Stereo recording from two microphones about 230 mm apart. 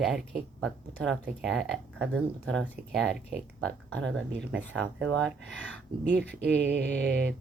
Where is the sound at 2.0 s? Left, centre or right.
Right.